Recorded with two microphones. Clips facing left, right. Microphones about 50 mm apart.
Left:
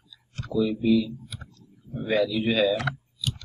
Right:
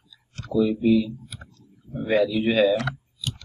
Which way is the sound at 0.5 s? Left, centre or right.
Centre.